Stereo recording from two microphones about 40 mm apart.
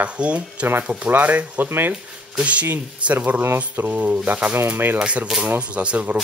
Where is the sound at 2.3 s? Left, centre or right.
Right.